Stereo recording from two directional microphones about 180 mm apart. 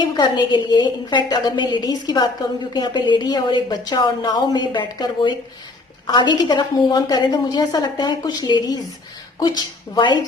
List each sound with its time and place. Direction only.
0.2 s a woman's voice: 25° left (ahead or behind)